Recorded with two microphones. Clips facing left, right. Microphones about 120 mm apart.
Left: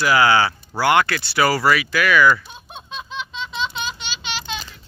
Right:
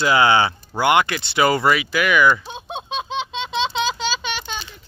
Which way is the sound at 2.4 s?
90° right.